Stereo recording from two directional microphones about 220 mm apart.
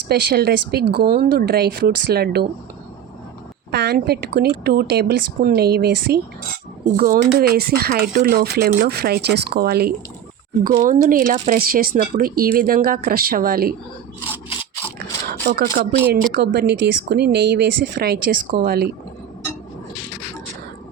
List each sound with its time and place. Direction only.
0.1 s speech: 45° right (ahead or behind)
3.7 s speech: 50° right (ahead or behind)
14.9 s a sound: 45° right (ahead or behind)
16.3 s speech: 45° right (ahead or behind)